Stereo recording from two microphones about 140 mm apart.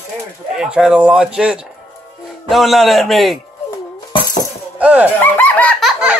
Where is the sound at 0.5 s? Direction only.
5° right (ahead or behind).